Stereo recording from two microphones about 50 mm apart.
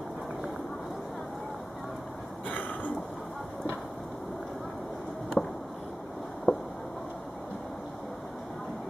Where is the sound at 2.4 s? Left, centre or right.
Left.